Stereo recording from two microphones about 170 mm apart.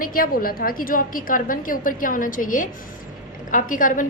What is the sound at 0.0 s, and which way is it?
A woman's voice, 55° left (ahead or behind).